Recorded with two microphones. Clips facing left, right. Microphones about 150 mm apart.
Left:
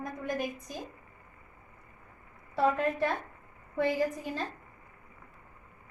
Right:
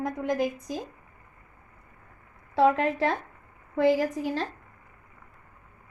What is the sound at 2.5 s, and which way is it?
A woman's voice, 90° right.